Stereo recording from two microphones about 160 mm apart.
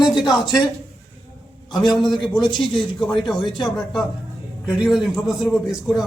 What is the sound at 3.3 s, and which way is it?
Speech, 30° left (ahead or behind).